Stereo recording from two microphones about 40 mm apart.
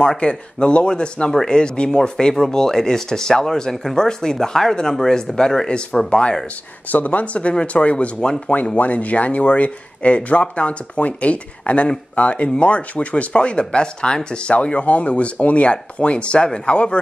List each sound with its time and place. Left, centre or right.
0.2 s speech: left
6.0 s speech: left
6.9 s speech: left
8.7 s speech: left